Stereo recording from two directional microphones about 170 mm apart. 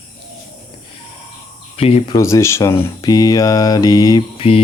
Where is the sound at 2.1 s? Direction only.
15° left (ahead or behind); by 4.6 s 30° left (ahead or behind).